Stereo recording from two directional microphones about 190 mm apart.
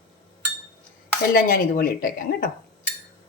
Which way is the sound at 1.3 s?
50° left (ahead or behind).